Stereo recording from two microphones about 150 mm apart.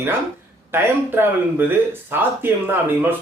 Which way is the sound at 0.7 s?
15° right (ahead or behind).